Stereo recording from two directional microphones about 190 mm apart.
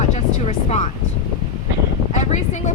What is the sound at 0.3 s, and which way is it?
Vehicle, 35° left (ahead or behind).